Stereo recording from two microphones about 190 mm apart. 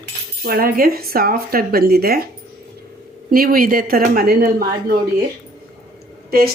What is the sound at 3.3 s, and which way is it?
Speech, 50° right (ahead or behind).